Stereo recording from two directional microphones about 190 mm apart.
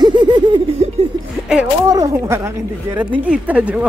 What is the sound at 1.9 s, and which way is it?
Speech, 15° right (ahead or behind).